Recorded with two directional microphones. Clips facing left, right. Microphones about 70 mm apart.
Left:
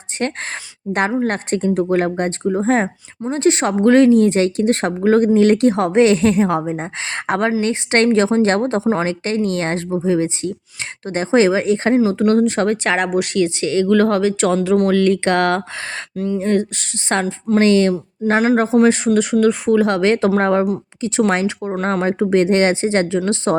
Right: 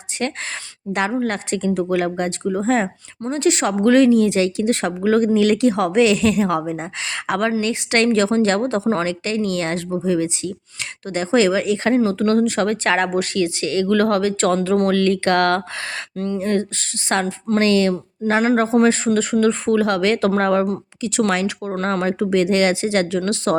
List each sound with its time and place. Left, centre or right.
1.2 s speech: left
2.4 s a woman's voice: left
11.9 s speech: centre
12.3 s a woman's voice: left
16.1 s speech: centre
16.4 s a woman's voice: centre
18.3 s a woman's voice: centre; by 23.6 s left